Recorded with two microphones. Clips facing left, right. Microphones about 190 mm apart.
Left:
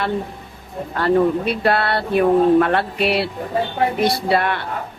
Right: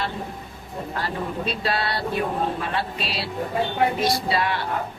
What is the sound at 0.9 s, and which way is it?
Speech, 60° left (ahead or behind).